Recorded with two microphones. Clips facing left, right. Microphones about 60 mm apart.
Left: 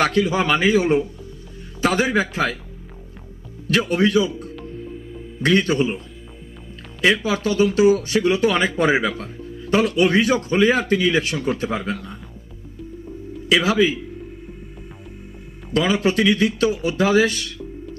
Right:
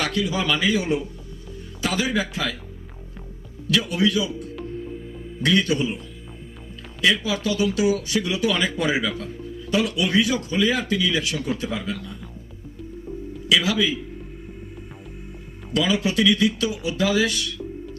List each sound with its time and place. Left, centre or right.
0.0 s speech: left
3.7 s speech: left
7.0 s speech: left
13.5 s speech: left
15.7 s speech: left